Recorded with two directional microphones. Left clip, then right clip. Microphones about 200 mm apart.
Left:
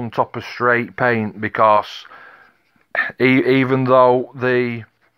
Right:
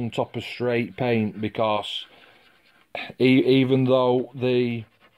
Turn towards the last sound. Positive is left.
turn(degrees=35)  # may be behind; listen again after turning